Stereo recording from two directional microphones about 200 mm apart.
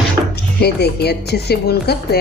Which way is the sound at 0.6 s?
55° left (ahead or behind).